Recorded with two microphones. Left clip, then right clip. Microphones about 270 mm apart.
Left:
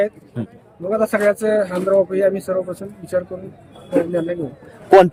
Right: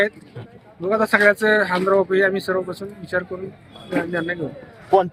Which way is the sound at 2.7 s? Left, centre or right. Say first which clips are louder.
Left 1 dB; left.